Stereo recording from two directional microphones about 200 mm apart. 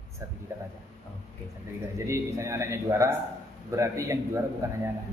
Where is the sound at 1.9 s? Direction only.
15° right (ahead or behind).